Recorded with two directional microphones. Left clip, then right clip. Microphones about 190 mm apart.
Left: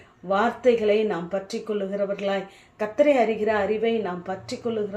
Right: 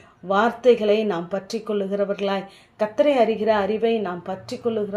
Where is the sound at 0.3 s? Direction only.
35° right (ahead or behind).